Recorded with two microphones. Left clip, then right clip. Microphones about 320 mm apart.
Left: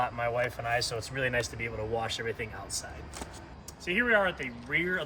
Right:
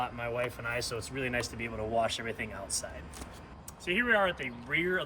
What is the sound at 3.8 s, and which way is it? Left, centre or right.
Speech, centre.